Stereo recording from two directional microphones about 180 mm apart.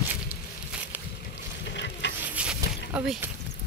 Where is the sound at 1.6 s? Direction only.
75° left (ahead or behind).